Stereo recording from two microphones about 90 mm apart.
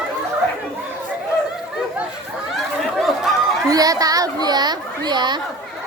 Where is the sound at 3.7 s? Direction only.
40° right (ahead or behind).